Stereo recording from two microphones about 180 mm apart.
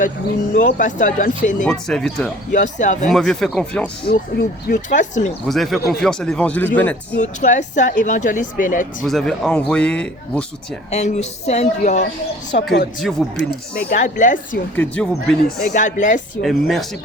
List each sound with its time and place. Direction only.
0.5 s a woman's voice: 45° left (ahead or behind)
1.6 s speech: 5° left (ahead or behind)
2.5 s a woman's voice: 45° left (ahead or behind)
3.1 s speech: centre (ahead or behind)
4.0 s a woman's voice: 55° left (ahead or behind)
5.5 s speech: centre (ahead or behind)
7.2 s a woman's voice: 45° left (ahead or behind)
9.0 s speech: centre (ahead or behind)
10.9 s a woman's voice: 40° left (ahead or behind)
13.0 s speech: centre (ahead or behind)
13.7 s a woman's voice: 45° left (ahead or behind)
14.8 s speech: 5° left (ahead or behind)
15.7 s a woman's voice: 45° left (ahead or behind)
16.4 s speech: centre (ahead or behind)